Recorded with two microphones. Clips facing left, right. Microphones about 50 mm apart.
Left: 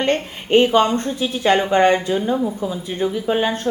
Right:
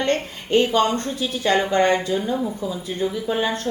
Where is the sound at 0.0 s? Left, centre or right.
Left.